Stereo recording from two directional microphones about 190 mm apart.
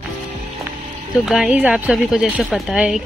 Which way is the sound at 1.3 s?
Centre (ahead or behind).